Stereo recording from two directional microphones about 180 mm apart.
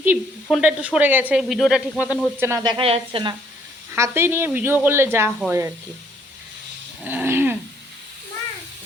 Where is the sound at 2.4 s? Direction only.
20° right (ahead or behind).